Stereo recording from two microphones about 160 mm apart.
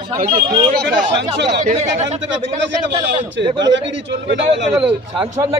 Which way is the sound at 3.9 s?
90° right.